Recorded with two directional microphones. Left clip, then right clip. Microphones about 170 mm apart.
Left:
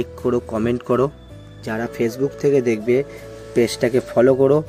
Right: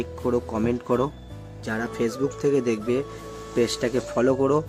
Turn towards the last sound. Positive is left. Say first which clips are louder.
# left 7 dB
turn(degrees=20)  # may be behind; listen again after turning